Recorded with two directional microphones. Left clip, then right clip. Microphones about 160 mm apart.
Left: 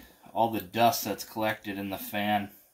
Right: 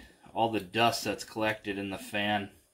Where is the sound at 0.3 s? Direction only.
25° left (ahead or behind).